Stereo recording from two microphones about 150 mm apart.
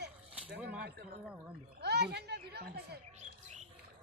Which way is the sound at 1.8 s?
90° right.